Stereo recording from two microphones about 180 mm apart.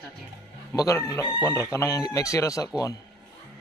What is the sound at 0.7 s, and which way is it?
Speech, 20° left (ahead or behind).